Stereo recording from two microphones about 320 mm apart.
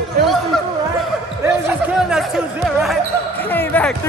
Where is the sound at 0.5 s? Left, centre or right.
Centre.